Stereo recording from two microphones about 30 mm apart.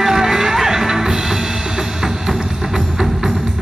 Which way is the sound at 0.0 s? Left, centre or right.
Centre.